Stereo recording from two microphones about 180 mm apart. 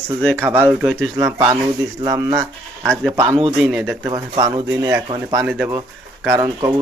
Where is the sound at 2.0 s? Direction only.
20° right (ahead or behind).